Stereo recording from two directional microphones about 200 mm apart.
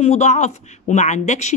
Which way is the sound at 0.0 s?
35° left (ahead or behind).